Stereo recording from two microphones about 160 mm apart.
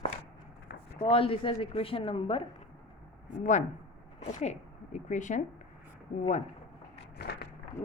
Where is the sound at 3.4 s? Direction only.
50° left (ahead or behind).